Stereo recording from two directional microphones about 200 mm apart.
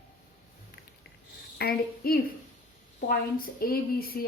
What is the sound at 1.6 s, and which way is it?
A woman's voice, 50° left (ahead or behind).